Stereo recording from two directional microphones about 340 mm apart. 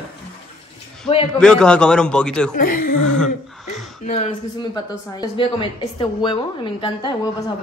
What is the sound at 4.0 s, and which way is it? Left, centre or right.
A woman's voice, centre.